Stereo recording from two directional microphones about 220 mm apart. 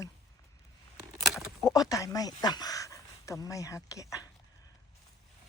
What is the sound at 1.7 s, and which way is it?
Speech, 15° left (ahead or behind).